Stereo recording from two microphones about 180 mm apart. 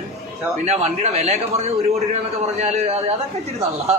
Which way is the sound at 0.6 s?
35° right (ahead or behind).